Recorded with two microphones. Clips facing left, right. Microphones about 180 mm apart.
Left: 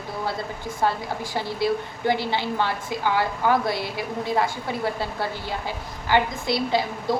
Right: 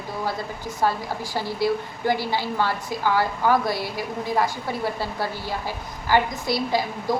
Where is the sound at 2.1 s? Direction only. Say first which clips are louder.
Even; 20° left (ahead or behind).